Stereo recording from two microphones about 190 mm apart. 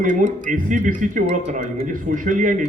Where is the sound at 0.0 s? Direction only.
45° right (ahead or behind).